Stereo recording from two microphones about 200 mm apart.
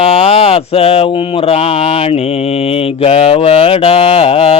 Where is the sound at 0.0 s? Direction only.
30° left (ahead or behind).